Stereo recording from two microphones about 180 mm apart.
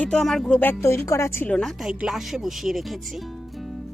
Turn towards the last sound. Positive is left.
turn(degrees=0)  # may be behind; listen again after turning